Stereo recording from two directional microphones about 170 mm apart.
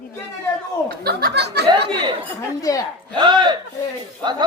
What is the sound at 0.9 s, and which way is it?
Speech, 65° right (ahead or behind).